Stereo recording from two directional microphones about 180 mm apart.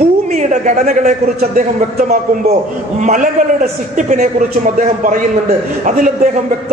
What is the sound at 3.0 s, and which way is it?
A man's voice, 45° right (ahead or behind).